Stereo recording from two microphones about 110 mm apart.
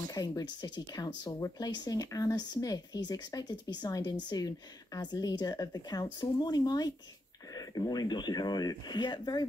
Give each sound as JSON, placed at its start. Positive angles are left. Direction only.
{"t": 0.1, "sound": "speech", "side_deg": 35}